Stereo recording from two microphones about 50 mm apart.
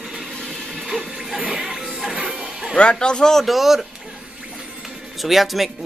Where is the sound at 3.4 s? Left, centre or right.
Centre.